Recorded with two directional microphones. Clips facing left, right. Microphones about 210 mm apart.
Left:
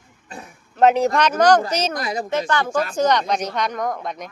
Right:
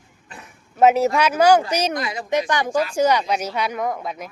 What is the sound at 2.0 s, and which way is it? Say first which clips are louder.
Speech: left 2 dB; 40° left (ahead or behind).